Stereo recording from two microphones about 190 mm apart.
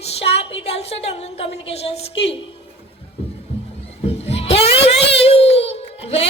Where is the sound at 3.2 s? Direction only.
30° left (ahead or behind).